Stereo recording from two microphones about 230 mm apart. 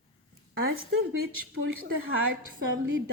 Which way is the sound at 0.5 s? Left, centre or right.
Right.